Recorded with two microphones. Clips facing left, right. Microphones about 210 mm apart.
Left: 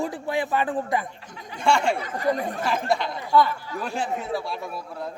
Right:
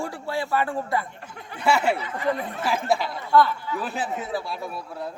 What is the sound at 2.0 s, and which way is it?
Speech, 40° left (ahead or behind).